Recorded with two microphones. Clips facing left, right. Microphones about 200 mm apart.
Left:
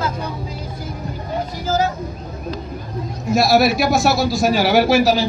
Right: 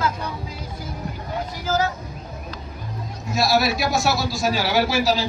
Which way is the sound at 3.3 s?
55° left (ahead or behind).